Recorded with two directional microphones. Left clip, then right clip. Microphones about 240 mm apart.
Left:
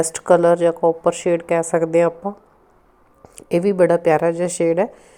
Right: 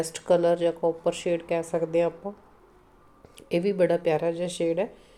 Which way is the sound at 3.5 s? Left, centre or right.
Left.